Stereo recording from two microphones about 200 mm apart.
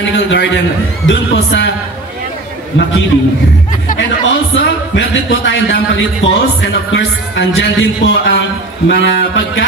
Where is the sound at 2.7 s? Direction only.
65° left (ahead or behind).